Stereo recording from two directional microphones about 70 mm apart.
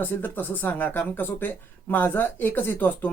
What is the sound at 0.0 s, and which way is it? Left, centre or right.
Speech, left.